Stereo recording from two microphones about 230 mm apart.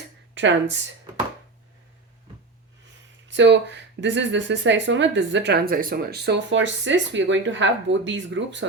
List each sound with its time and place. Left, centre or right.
0.3 s speech: right
3.2 s speech: right